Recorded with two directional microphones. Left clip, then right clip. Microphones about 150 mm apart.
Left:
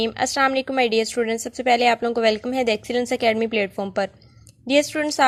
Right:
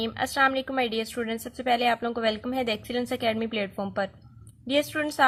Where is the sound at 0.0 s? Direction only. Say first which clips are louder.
Left 4 dB; 40° left (ahead or behind).